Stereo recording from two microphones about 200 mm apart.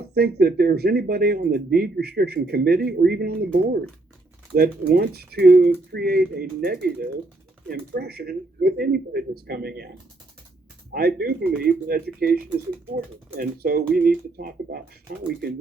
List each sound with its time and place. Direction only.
0.0 s speech: 50° right (ahead or behind)
10.9 s speech: 50° right (ahead or behind)